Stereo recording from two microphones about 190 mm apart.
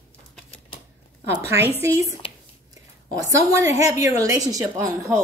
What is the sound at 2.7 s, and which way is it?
A woman's voice, 15° right (ahead or behind).